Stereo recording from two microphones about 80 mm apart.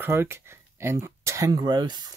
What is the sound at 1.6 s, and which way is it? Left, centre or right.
Speech, right.